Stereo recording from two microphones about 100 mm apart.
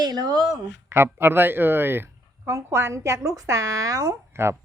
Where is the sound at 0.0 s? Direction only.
45° right (ahead or behind).